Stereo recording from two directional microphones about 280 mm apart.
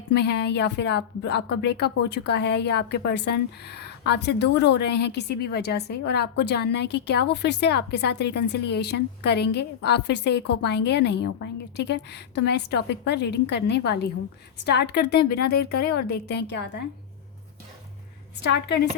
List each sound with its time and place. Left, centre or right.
0.1 s a woman's voice: left